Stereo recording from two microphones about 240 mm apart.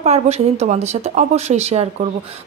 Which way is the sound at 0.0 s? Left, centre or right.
Right.